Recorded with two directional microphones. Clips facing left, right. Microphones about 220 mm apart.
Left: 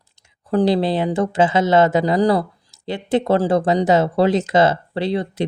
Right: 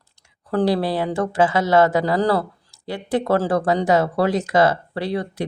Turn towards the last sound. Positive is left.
turn(degrees=25)  # may be behind; listen again after turning